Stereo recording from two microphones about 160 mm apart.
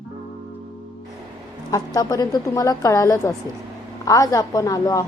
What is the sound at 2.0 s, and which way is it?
A woman's voice, 20° left (ahead or behind).